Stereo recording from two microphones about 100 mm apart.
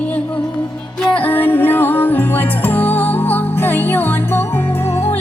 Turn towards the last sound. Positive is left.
turn(degrees=90)